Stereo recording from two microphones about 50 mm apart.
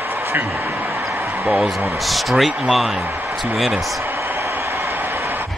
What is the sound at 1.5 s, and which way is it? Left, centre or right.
Speech, centre.